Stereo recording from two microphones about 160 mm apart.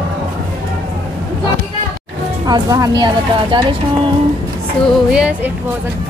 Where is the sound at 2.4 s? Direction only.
25° right (ahead or behind).